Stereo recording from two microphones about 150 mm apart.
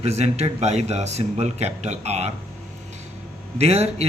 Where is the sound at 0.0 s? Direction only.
45° right (ahead or behind).